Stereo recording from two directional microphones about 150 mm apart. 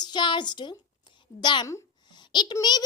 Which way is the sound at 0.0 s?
30° left (ahead or behind).